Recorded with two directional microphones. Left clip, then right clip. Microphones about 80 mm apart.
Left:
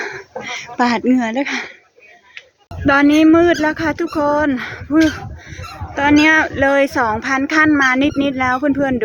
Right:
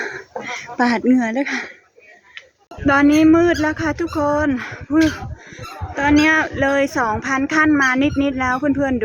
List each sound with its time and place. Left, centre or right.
0.4 s speech: centre
2.8 s speech: centre
4.9 s honk: left
6.0 s a man's voice: left
6.2 s speech: left
7.8 s a child's voice: left
8.5 s a man's voice: left